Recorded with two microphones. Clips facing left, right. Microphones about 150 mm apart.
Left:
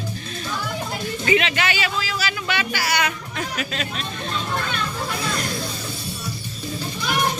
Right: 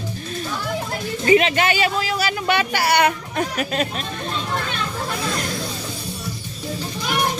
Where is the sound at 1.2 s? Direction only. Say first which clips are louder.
Right 5 dB; 35° right (ahead or behind).